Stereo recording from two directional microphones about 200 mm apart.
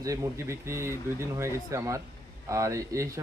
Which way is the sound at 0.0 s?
15° right (ahead or behind).